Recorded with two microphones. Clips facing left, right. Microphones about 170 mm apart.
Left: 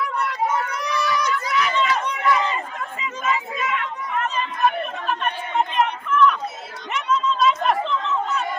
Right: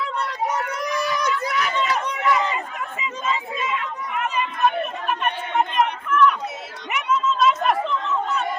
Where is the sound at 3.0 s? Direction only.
25° right (ahead or behind).